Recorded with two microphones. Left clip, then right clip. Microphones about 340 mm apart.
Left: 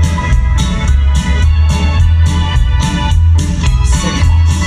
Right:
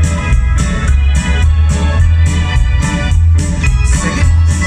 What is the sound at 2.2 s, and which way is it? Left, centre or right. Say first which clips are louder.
Organ: left 2 dB; centre.